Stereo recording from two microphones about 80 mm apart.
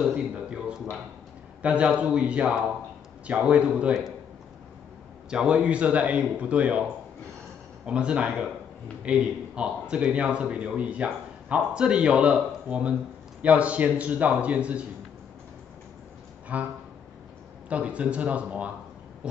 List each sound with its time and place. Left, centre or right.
0.1 s a sound: centre
1.6 s a man's voice: centre
5.3 s a man's voice: centre
7.8 s a man's voice: centre
16.5 s a man's voice: centre